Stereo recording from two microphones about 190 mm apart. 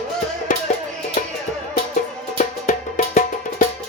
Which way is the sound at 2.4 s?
45° left (ahead or behind).